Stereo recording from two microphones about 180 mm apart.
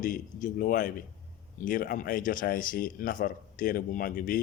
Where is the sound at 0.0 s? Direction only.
45° left (ahead or behind).